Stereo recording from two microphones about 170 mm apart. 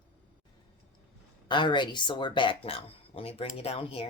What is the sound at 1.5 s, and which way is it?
Speech, 25° left (ahead or behind).